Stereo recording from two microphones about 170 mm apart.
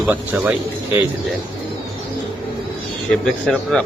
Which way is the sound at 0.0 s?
10° right (ahead or behind).